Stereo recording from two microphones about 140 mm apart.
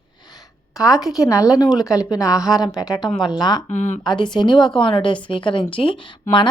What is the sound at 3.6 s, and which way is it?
Speech, 60° left (ahead or behind).